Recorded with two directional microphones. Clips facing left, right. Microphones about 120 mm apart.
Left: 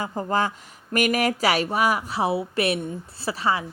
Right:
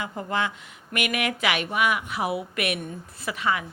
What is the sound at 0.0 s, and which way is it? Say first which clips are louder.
A woman's voice: left 4 dB; 35° left (ahead or behind).